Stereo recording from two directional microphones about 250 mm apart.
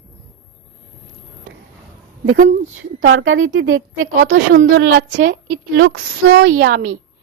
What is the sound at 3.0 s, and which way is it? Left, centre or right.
A woman's voice, right.